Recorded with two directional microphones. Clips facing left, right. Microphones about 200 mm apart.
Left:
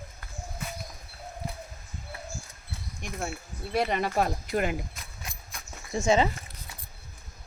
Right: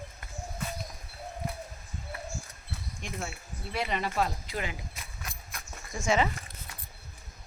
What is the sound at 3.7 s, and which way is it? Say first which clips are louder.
Speech: left 5 dB; 45° left (ahead or behind).